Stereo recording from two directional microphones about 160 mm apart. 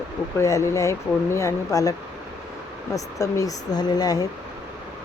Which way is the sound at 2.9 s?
20° left (ahead or behind).